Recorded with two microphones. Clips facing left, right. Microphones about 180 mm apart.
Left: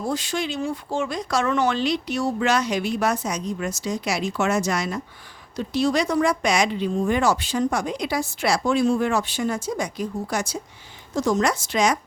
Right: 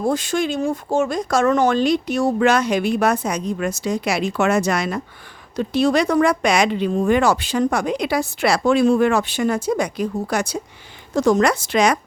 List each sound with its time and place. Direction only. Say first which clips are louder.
0.0 s speech: right 6 dB; 50° right (ahead or behind)